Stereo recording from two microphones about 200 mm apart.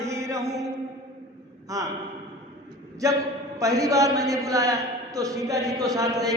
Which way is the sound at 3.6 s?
15° right (ahead or behind).